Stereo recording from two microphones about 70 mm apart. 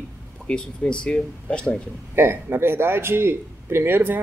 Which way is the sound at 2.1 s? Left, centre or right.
Right.